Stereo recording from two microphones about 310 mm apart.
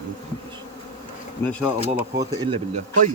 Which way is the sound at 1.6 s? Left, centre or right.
Centre.